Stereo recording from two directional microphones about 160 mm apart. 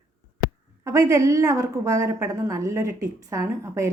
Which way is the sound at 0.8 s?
20° right (ahead or behind).